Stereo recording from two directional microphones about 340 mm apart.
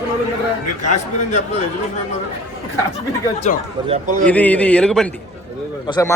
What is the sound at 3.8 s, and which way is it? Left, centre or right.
Speech, centre.